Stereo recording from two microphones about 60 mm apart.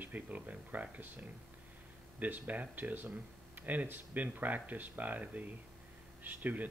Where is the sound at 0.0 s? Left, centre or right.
Right.